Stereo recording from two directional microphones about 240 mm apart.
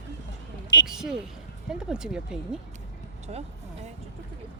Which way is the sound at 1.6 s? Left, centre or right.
Centre.